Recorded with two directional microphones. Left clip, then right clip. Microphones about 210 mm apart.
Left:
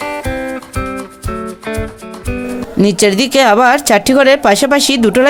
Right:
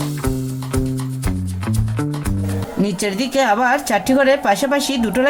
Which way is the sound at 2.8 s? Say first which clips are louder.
Left 10 dB; 50° left (ahead or behind).